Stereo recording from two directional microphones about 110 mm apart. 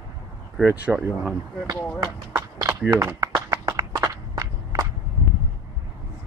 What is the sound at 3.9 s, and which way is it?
Walk, 35° right (ahead or behind).